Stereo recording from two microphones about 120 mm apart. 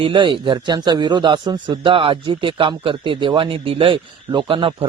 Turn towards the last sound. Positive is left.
turn(degrees=-50)  # may be behind; listen again after turning